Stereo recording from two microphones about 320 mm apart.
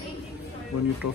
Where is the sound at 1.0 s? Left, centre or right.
Left.